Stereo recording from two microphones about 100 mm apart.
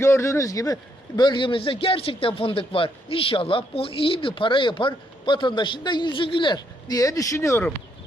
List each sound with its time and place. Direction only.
0.0 s a man's voice: 25° left (ahead or behind)